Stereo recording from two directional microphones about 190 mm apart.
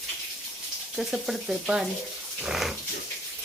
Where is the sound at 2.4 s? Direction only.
Centre (ahead or behind).